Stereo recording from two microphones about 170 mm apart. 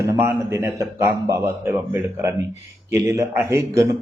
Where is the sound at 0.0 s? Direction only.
15° right (ahead or behind).